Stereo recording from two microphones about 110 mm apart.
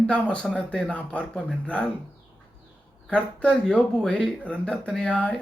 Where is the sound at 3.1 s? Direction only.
10° left (ahead or behind).